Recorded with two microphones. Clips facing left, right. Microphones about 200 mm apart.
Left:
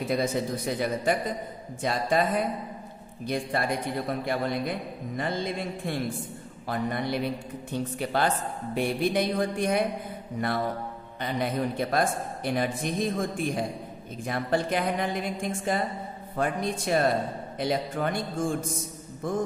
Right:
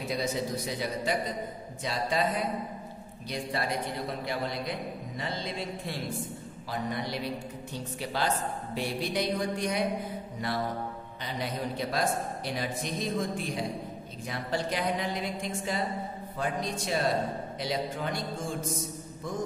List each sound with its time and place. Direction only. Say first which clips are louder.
0.1 s a man's voice: left 3 dB; 55° left (ahead or behind)
4.3 s a man's voice: left 5 dB; 50° left (ahead or behind)
19.2 s a man's voice: left 6 dB; 55° left (ahead or behind)